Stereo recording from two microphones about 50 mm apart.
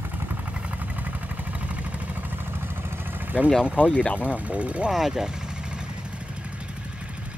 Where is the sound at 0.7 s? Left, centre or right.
Right.